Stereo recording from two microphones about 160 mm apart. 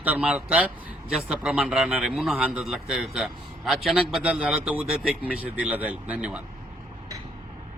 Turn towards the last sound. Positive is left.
turn(degrees=-5)  # may be behind; listen again after turning